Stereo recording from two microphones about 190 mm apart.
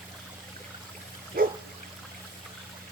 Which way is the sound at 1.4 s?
50° right (ahead or behind).